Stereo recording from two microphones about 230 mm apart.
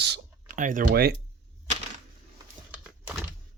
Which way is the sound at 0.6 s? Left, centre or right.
Right.